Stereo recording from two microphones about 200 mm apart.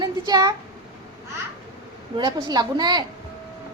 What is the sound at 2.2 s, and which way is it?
Speech, 20° right (ahead or behind).